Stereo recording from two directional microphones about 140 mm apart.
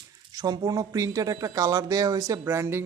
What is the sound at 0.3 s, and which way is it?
Speech, 30° right (ahead or behind).